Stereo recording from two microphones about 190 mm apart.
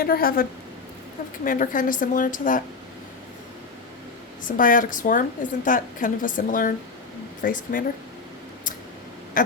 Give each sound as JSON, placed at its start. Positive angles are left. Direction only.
{"t": 0.0, "sound": "a woman's voice", "side_deg": 50}
{"t": 1.5, "sound": "a woman's voice", "side_deg": 45}
{"t": 4.4, "sound": "a woman's voice", "side_deg": 45}